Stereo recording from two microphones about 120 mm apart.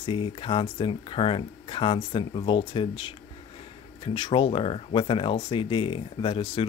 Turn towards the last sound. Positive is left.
turn(degrees=45)  # may be behind; listen again after turning